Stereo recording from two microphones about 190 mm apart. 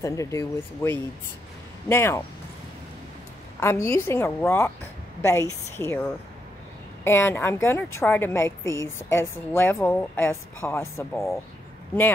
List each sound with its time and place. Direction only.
0.0 s a woman's voice: 15° left (ahead or behind)
3.5 s a woman's voice: 15° left (ahead or behind)
7.1 s a woman's voice: 10° left (ahead or behind)